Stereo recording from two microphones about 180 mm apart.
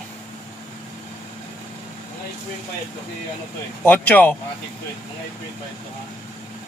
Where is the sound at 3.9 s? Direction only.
10° left (ahead or behind).